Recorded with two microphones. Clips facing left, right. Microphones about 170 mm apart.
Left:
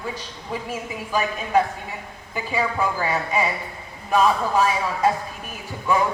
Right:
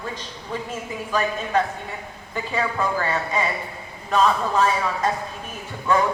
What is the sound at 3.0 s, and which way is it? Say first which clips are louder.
Speech: left 1 dB; 10° left (ahead or behind).